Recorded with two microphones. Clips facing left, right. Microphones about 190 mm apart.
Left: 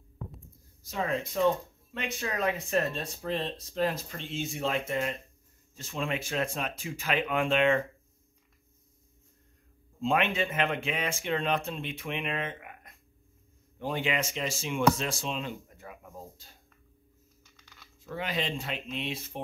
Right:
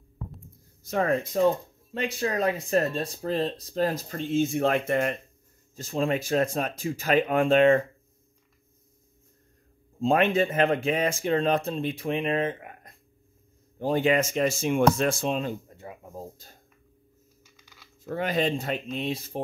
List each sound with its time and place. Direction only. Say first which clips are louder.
0.8 s speech: right 6 dB; 55° right (ahead or behind)
2.0 s speech: right 6 dB; 35° right (ahead or behind); by 5.1 s 60° right (ahead or behind)
5.8 s speech: right 7 dB; 40° right (ahead or behind)
9.9 s speech: right 6 dB; 40° right (ahead or behind)
15.7 s a sound: right 5 dB; 25° right (ahead or behind)
18.0 s speech: right 7 dB; 45° right (ahead or behind)